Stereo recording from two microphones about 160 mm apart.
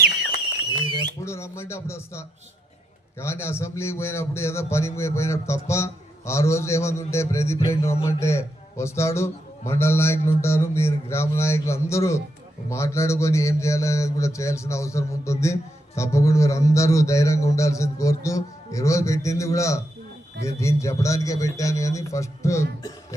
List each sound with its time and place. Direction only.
0.9 s a man's voice: 15° left (ahead or behind)